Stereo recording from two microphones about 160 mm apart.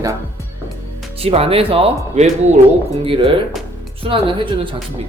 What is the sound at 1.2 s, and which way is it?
Speech, 40° right (ahead or behind).